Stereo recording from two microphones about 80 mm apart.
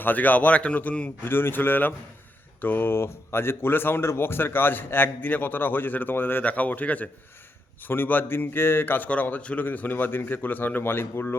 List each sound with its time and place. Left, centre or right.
0.0 s speech: left